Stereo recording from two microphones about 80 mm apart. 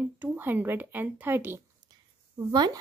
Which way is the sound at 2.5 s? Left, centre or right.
Right.